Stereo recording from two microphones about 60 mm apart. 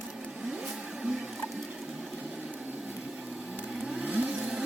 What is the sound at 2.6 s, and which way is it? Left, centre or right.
Wood, right.